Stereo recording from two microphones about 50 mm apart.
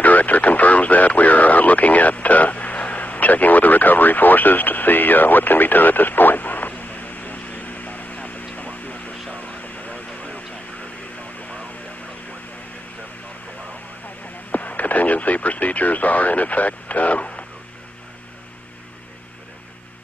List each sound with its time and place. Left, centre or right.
0.0 s radio: left
9.3 s vehicle: left
14.5 s radio: left